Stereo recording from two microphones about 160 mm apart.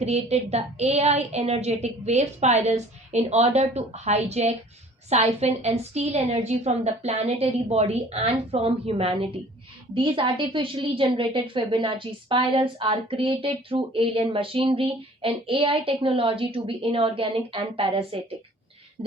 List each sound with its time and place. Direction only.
0.0 s a woman's voice: 40° right (ahead or behind)